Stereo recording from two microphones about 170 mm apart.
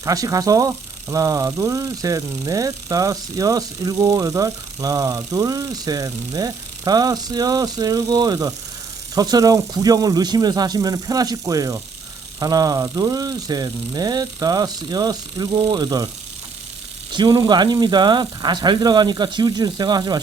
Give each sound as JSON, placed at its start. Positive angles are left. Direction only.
{"t": 0.0, "sound": "speech", "side_deg": -20}
{"t": 17.1, "sound": "speech", "side_deg": -25}